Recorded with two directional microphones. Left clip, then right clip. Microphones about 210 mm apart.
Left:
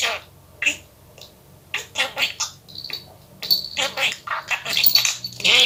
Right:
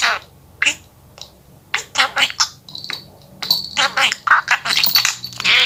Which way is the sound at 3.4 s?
20° right (ahead or behind).